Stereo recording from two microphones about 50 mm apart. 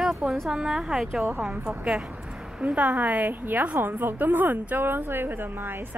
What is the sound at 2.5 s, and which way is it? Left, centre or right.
A woman's voice, right.